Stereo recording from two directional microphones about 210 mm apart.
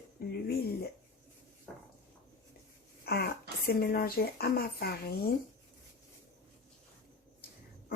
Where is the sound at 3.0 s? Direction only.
50° left (ahead or behind).